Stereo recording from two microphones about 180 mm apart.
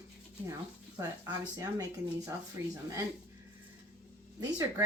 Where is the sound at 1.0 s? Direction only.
15° right (ahead or behind).